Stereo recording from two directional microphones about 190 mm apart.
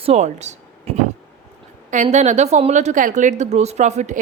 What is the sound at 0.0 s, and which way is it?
A woman's voice, 35° right (ahead or behind).